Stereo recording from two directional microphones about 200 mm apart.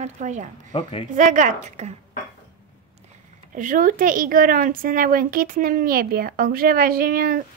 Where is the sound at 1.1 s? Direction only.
40° right (ahead or behind).